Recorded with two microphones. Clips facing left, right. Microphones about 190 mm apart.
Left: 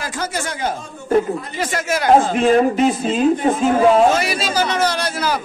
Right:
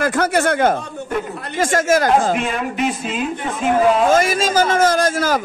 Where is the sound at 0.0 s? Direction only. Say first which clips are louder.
Right 8 dB; 60° right (ahead or behind).